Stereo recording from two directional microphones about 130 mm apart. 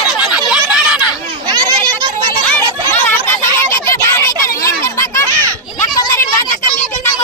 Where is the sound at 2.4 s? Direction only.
10° left (ahead or behind).